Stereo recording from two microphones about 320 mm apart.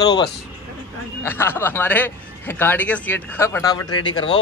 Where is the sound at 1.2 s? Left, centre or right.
Centre.